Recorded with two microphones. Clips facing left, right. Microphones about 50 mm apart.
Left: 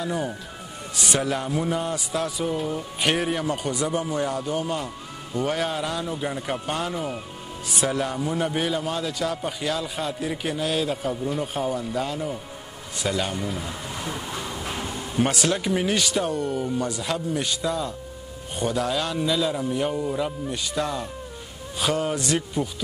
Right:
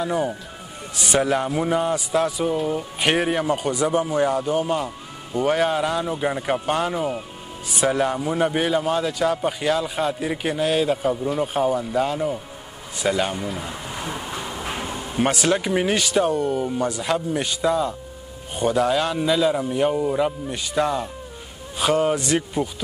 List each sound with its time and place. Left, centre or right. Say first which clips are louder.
0.0 s a man's voice: right 4 dB; centre
13.0 s a sound: right 4 dB; centre
15.3 s a man's voice: right 3 dB; centre